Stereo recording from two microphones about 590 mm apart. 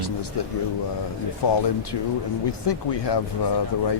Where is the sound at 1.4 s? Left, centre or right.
Left.